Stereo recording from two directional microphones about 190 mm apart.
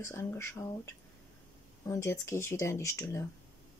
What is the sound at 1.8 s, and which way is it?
Speech, 15° left (ahead or behind).